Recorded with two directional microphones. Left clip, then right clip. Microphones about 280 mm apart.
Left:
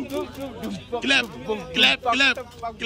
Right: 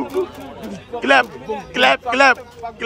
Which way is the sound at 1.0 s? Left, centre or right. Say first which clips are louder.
Right 8 dB; centre.